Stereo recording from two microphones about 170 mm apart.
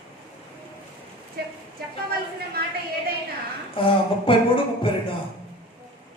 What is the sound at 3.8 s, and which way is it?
Speech, 30° left (ahead or behind).